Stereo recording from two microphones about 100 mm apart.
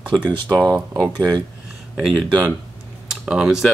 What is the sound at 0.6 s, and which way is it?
Speech, 40° right (ahead or behind).